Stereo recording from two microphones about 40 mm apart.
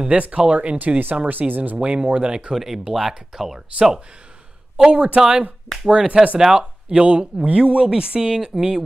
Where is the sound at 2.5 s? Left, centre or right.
Centre.